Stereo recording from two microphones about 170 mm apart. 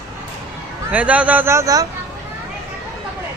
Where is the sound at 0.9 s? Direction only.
10° right (ahead or behind).